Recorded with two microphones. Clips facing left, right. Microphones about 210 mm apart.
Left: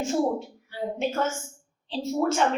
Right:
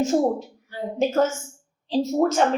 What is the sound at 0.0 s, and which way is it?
A woman's voice, 40° right (ahead or behind).